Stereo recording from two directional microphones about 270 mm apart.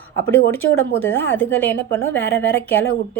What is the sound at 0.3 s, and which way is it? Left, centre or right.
A woman's voice, centre.